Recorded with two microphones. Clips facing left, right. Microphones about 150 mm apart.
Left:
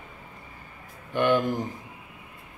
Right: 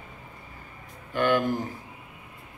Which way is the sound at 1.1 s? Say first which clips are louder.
Left 1 dB; 20° left (ahead or behind).